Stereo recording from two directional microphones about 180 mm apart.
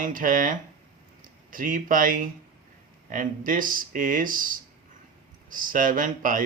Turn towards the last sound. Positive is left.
turn(degrees=-50)  # may be behind; listen again after turning